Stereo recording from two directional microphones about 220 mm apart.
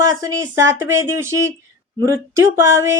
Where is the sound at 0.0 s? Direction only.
15° right (ahead or behind).